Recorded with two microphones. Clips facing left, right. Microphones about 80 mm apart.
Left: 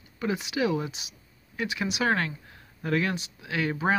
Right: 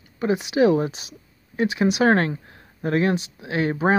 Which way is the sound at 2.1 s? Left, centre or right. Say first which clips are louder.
Right 8 dB; right.